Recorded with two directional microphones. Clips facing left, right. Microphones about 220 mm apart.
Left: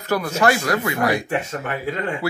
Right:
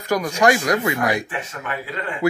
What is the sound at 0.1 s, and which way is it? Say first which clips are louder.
Speech: right 1 dB; 15° right (ahead or behind).